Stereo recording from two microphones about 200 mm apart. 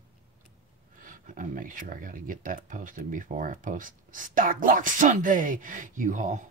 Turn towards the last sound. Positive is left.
turn(degrees=-40)  # may be behind; listen again after turning